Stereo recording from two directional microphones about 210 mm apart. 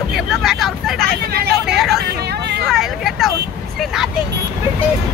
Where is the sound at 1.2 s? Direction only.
50° right (ahead or behind).